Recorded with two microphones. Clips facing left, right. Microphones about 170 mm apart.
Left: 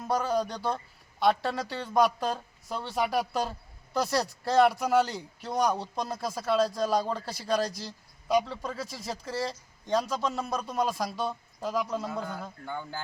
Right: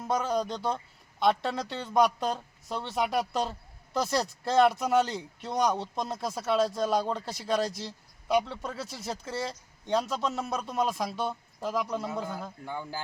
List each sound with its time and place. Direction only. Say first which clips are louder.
0.1 s speech: left 1 dB; centre (ahead or behind)
0.4 s speech: right 1 dB; 20° right (ahead or behind)
1.2 s speech: left 1 dB; centre (ahead or behind)
12.0 s a man's voice: even; 20° right (ahead or behind)
12.3 s a man's voice: even; 5° right (ahead or behind)